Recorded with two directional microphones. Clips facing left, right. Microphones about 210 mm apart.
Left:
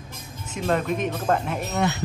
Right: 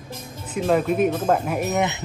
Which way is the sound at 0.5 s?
5° right (ahead or behind).